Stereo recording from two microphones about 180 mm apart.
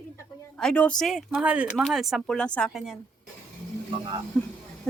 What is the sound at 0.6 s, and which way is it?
Speech, 5° left (ahead or behind).